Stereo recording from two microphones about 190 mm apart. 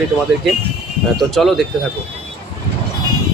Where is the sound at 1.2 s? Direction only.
Centre (ahead or behind).